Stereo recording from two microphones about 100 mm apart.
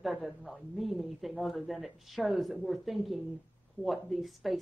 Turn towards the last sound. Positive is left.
turn(degrees=0)  # may be behind; listen again after turning